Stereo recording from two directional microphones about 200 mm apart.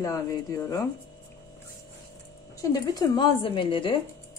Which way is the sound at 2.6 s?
20° left (ahead or behind).